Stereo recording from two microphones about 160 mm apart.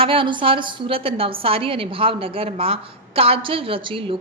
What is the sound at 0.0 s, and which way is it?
A woman's voice, 35° right (ahead or behind).